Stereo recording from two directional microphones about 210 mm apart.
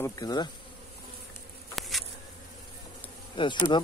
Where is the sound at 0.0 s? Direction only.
20° left (ahead or behind).